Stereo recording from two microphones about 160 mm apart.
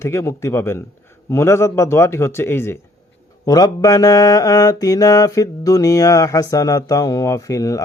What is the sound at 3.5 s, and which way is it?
Mantra, 25° left (ahead or behind).